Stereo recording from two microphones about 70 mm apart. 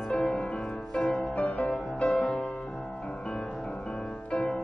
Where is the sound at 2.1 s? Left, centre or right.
Centre.